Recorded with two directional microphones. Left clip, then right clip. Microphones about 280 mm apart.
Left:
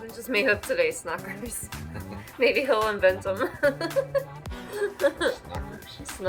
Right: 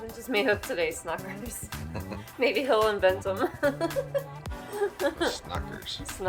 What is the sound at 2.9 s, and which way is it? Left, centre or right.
Speech, centre.